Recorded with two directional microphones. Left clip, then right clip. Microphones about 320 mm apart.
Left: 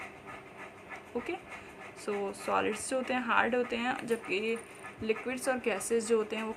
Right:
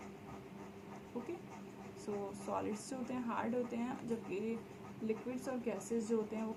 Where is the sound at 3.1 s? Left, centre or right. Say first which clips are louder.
Left 12 dB; left.